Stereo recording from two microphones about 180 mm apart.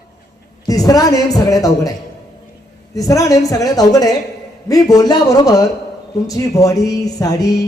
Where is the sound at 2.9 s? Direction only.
20° left (ahead or behind).